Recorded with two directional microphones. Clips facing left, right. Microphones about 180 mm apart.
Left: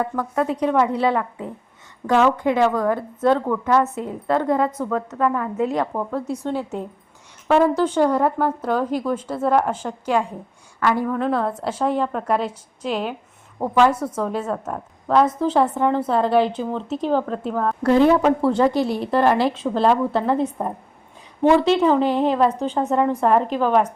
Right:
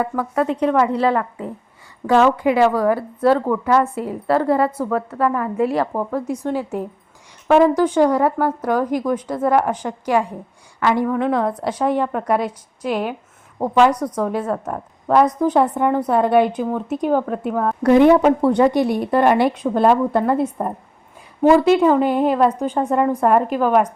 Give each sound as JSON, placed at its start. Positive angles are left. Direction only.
{"t": 0.0, "sound": "a woman's voice", "side_deg": -10}
{"t": 2.0, "sound": "a woman's voice", "side_deg": -10}